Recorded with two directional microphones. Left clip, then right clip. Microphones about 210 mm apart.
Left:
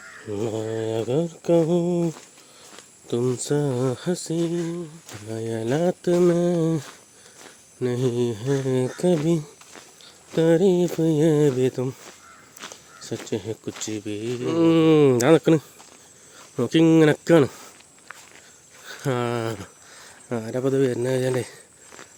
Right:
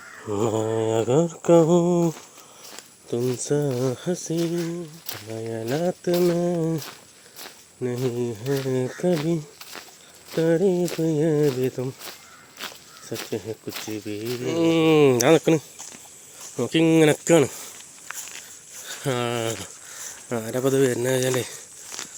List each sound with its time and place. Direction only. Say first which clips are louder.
0.3 s mantra: right 4 dB; centre (ahead or behind)
3.1 s speech: left 1 dB; 20° left (ahead or behind)
5.3 s speech: left 2 dB; 30° left (ahead or behind)
10.3 s speech: left 2 dB; 25° left (ahead or behind)
12.6 s dog: right 4 dB; 55° right (ahead or behind)
13.3 s speech: left 2 dB; 30° left (ahead or behind)
18.1 s walk: right 7 dB; 55° right (ahead or behind)
18.9 s speech: even; 25° left (ahead or behind)
21.8 s a sound: right 8 dB; 55° right (ahead or behind)